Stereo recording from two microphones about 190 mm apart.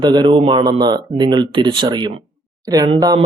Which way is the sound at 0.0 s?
20° right (ahead or behind).